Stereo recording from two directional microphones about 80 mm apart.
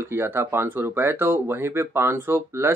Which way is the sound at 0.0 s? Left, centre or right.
Right.